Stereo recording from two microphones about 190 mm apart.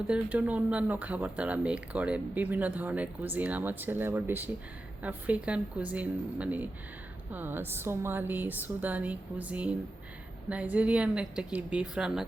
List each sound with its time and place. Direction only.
0.1 s a woman's voice: 10° right (ahead or behind)